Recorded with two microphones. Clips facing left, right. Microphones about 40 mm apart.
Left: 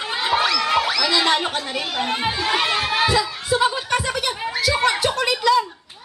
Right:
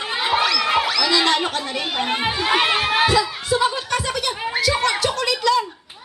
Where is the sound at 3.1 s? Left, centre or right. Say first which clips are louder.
Right 1 dB; centre.